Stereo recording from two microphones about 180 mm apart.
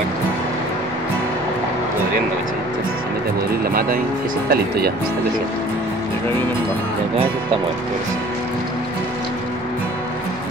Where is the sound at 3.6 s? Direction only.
55° right (ahead or behind).